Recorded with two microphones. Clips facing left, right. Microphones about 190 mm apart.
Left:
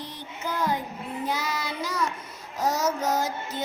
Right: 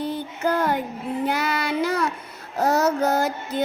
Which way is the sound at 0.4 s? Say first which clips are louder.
Right 6 dB; 60° right (ahead or behind).